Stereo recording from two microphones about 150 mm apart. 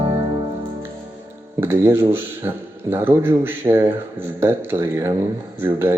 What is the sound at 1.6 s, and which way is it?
Speech, 15° right (ahead or behind).